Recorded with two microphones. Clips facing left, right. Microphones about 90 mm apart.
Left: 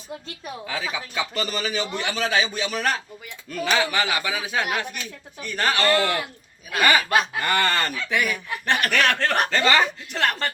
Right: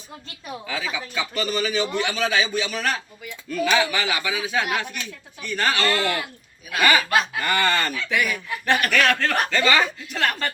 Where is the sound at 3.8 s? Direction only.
35° left (ahead or behind).